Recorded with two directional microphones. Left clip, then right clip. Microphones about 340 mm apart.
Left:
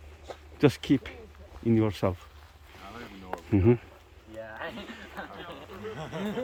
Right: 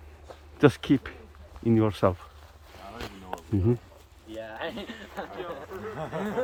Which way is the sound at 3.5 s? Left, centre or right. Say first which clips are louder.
Left 4 dB; centre.